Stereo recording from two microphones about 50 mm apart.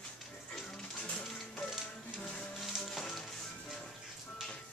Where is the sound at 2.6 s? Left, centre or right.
Centre.